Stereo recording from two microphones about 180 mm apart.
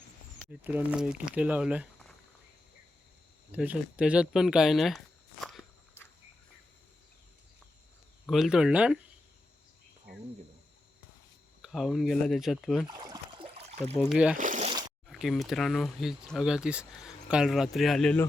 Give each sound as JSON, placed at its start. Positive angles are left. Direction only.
{"t": 0.6, "sound": "speech", "side_deg": -10}
{"t": 3.5, "sound": "speech", "side_deg": -10}
{"t": 8.3, "sound": "speech", "side_deg": -5}
{"t": 11.6, "sound": "speech", "side_deg": 0}
{"t": 12.9, "sound": "trickle", "side_deg": -25}
{"t": 13.7, "sound": "a sound", "side_deg": -35}
{"t": 14.1, "sound": "speech", "side_deg": -5}
{"t": 14.3, "sound": "a sound", "side_deg": -45}
{"t": 14.7, "sound": "a sound", "side_deg": -25}
{"t": 15.0, "sound": "speech", "side_deg": 0}